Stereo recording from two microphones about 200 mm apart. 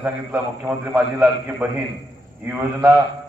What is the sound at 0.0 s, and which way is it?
A man's voice, 10° right (ahead or behind).